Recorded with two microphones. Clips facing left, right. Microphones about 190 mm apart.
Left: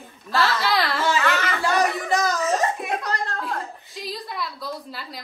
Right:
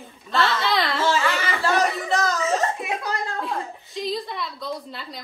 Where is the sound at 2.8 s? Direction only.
Centre (ahead or behind).